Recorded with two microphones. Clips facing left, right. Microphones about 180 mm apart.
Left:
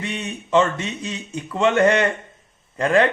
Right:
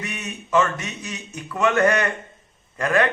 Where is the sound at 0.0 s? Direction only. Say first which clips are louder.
Left 4 dB; 30° left (ahead or behind).